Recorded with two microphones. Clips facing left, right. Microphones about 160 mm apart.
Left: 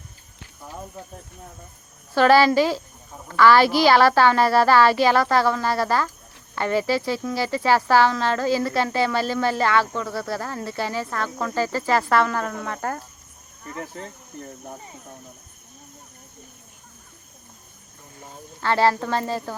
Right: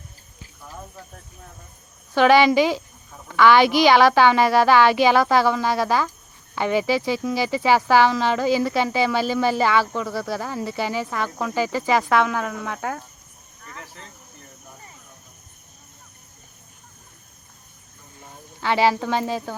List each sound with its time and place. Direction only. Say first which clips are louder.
2.1 s speech: right 1 dB; centre (ahead or behind)
13.7 s speech: left 8 dB; 45° left (ahead or behind)
18.6 s speech: even; 5° right (ahead or behind)